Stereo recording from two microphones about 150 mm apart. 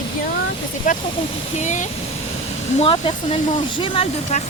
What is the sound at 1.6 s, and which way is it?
Speech, 50° left (ahead or behind).